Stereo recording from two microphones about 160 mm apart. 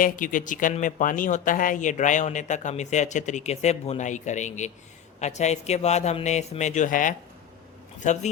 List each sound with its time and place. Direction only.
0.0 s speech: 55° left (ahead or behind)